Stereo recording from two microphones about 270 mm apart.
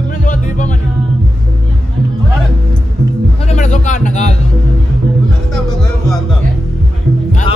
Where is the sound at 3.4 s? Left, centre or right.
Left.